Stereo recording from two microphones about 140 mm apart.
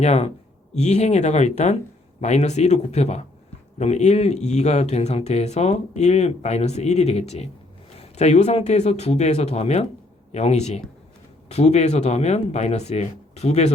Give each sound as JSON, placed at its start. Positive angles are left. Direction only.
{"t": 0.0, "sound": "speech", "side_deg": 50}